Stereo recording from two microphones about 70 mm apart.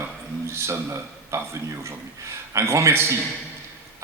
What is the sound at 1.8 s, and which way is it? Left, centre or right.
Speech, right.